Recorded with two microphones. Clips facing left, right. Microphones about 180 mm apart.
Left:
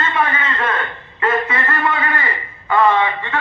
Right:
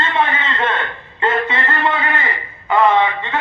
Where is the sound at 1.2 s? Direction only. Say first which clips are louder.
Even; 25° right (ahead or behind).